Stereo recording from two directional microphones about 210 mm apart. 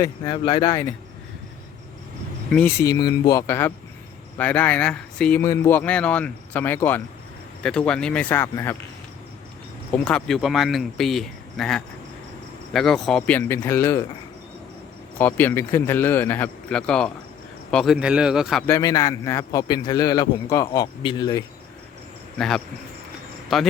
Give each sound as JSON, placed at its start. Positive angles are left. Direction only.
{"t": 0.0, "sound": "a man's voice", "side_deg": 20}
{"t": 2.8, "sound": "a man's voice", "side_deg": 20}
{"t": 9.9, "sound": "a man's voice", "side_deg": 5}
{"t": 15.2, "sound": "a man's voice", "side_deg": 10}
{"t": 18.7, "sound": "a man's voice", "side_deg": 15}
{"t": 22.4, "sound": "speech", "side_deg": 0}